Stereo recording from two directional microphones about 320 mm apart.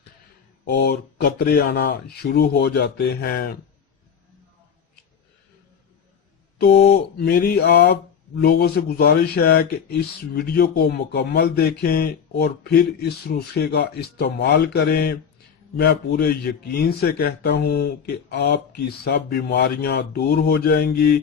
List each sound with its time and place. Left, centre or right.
0.6 s a man's voice: left
6.6 s a man's voice: left